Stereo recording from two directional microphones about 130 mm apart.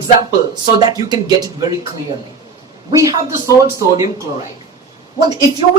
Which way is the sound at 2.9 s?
25° right (ahead or behind).